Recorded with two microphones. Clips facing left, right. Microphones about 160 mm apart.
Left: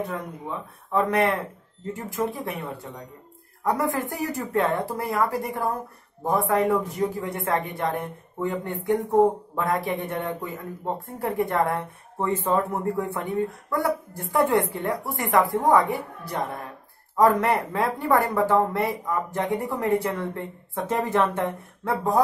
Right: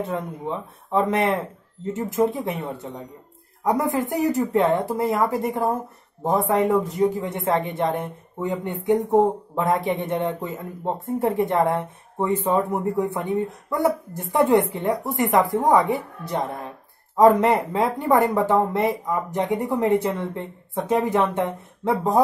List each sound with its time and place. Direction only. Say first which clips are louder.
0.0 s a woman's voice: right 4 dB; 25° right (ahead or behind)